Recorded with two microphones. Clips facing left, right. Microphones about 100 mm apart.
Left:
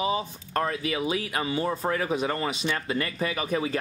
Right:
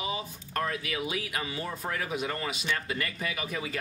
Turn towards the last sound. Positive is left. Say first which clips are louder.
# left 7 dB
turn(degrees=35)  # may be behind; listen again after turning